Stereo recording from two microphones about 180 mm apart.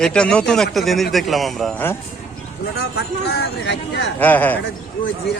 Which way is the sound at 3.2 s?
65° left (ahead or behind).